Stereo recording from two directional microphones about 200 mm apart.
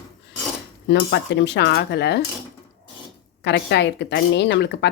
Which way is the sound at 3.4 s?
60° left (ahead or behind).